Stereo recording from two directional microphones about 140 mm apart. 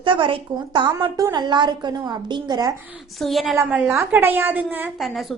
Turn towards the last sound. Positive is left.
turn(degrees=0)  # may be behind; listen again after turning